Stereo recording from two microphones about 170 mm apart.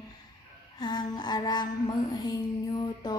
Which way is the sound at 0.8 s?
25° left (ahead or behind).